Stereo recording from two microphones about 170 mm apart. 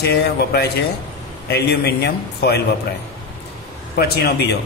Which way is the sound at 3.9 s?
65° left (ahead or behind).